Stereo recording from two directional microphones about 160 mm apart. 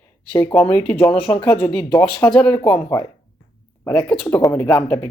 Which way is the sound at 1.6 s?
25° left (ahead or behind).